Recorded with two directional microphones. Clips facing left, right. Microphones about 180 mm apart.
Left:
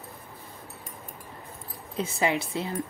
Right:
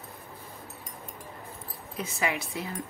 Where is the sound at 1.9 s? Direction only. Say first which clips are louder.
Left 5 dB; 30° left (ahead or behind).